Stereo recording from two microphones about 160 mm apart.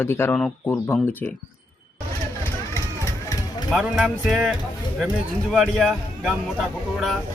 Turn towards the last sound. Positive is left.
turn(degrees=0)  # may be behind; listen again after turning